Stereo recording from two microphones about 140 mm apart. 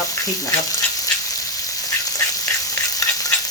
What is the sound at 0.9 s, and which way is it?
Duck, 25° left (ahead or behind).